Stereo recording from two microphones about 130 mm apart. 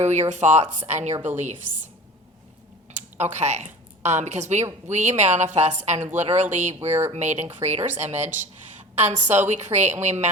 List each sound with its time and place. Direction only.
0.0 s speech: 60° right (ahead or behind)
1.1 s a woman's voice: 15° right (ahead or behind)
2.9 s speech: 60° right (ahead or behind)